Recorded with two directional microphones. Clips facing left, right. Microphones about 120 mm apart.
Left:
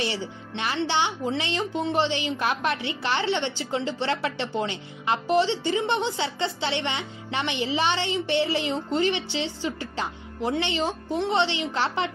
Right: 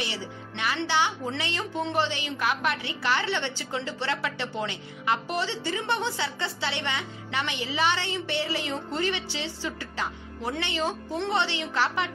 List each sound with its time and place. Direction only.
0.6 s a woman's voice: 25° left (ahead or behind)